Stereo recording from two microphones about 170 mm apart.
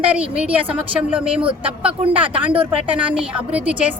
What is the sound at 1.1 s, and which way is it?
Speech, 5° right (ahead or behind).